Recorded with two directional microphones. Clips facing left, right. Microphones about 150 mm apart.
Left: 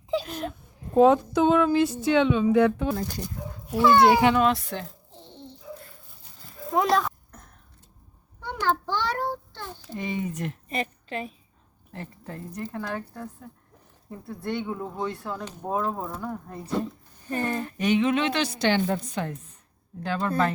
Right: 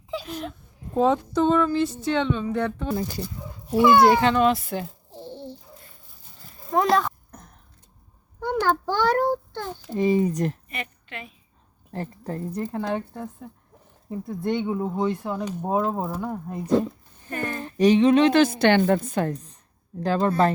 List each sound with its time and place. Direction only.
0.3 s speech: centre (ahead or behind)
2.9 s speech: 10° right (ahead or behind)
4.0 s speech: 10° left (ahead or behind)
4.4 s speech: 5° right (ahead or behind)
6.7 s a child's voice: centre (ahead or behind)
8.6 s a sound: 45° right (ahead or behind)
9.9 s a woman's voice: 35° right (ahead or behind)
10.7 s a woman's voice: 35° left (ahead or behind)
11.9 s speech: 35° right (ahead or behind); by 16.6 s 15° right (ahead or behind)
17.6 s a woman's voice: 35° right (ahead or behind)